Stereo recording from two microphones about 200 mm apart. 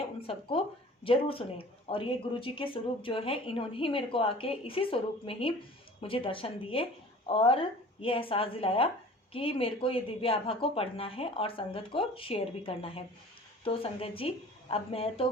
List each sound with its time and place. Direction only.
0.2 s speech: 30° left (ahead or behind)